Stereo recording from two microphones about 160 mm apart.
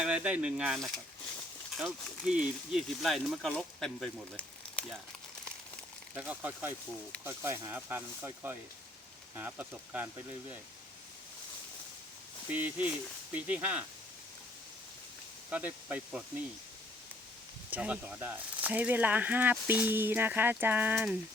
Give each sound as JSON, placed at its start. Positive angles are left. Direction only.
{"t": 0.0, "sound": "speech", "side_deg": -10}
{"t": 6.1, "sound": "speech", "side_deg": -10}
{"t": 12.5, "sound": "speech", "side_deg": -10}
{"t": 15.4, "sound": "speech", "side_deg": -10}
{"t": 17.7, "sound": "speech", "side_deg": -10}